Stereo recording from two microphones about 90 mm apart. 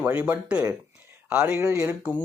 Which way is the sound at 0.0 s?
20° right (ahead or behind).